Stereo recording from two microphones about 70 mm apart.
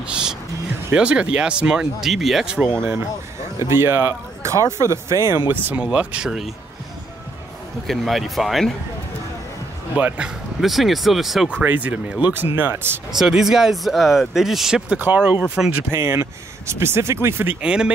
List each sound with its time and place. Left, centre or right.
0.0 s music: centre
0.9 s speech: centre
2.8 s speech: right
5.5 s speech: right
5.8 s speech: centre
7.8 s speech: centre
9.9 s speech: centre
10.6 s speech: centre
11.6 s speech: right
13.2 s speech: centre
14.9 s speech: right
15.9 s speech: right
17.6 s speech: centre